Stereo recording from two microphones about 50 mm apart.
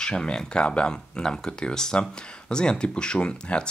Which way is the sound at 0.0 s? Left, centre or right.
Centre.